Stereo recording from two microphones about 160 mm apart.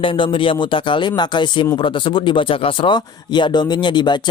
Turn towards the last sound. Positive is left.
turn(degrees=30)  # may be behind; listen again after turning